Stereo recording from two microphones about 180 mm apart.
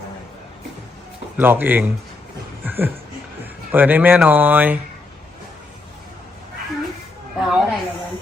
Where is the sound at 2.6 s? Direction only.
10° right (ahead or behind).